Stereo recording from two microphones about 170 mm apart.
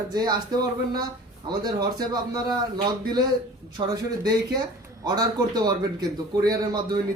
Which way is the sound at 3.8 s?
25° right (ahead or behind).